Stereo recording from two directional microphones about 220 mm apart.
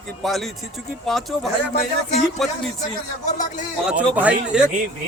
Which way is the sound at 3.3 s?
35° left (ahead or behind).